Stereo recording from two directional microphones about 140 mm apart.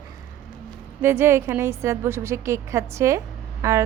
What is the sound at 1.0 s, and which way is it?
Speech, 15° right (ahead or behind).